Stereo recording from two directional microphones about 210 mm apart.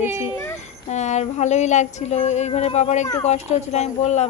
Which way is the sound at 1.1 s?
35° left (ahead or behind).